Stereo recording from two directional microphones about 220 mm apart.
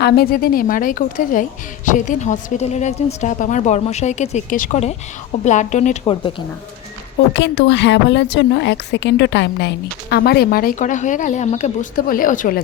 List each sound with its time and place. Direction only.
0.0 s a woman's voice: 45° left (ahead or behind); by 6.3 s 25° left (ahead or behind)
7.3 s speech: 50° left (ahead or behind)